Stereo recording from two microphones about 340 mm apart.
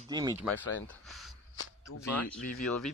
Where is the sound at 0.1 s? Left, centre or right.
Centre.